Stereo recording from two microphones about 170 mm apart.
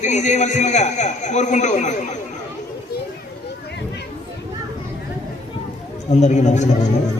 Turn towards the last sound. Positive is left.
turn(degrees=45)  # may be behind; listen again after turning